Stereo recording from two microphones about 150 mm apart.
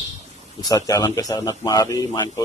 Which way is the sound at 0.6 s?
25° left (ahead or behind).